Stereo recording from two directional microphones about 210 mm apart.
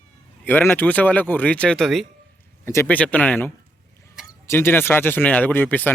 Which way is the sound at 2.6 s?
10° left (ahead or behind).